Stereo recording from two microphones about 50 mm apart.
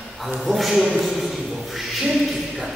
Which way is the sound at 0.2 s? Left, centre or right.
Centre.